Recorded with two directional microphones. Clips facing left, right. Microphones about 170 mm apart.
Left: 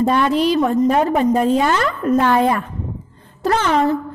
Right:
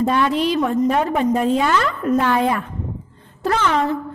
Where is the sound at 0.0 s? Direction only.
40° left (ahead or behind).